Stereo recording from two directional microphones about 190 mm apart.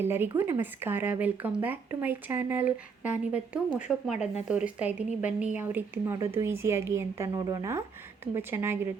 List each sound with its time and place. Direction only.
0.0 s a woman's voice: 10° right (ahead or behind)